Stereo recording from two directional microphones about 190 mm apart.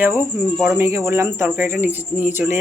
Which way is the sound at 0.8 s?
15° right (ahead or behind).